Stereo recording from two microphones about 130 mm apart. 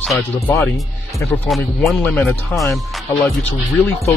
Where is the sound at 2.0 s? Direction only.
10° left (ahead or behind).